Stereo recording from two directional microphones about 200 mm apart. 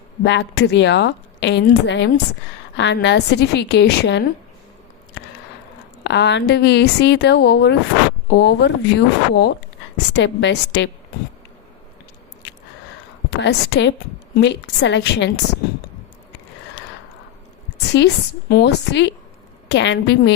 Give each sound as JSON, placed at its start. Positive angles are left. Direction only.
{"t": 0.3, "sound": "a woman's voice", "side_deg": 60}
{"t": 6.0, "sound": "a woman's voice", "side_deg": 60}
{"t": 13.4, "sound": "a woman's voice", "side_deg": 60}
{"t": 17.9, "sound": "a woman's voice", "side_deg": 55}